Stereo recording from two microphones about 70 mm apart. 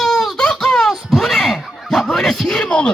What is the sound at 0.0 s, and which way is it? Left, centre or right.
Wail, centre.